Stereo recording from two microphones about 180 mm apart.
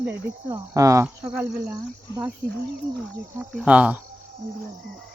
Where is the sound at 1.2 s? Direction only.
5° right (ahead or behind).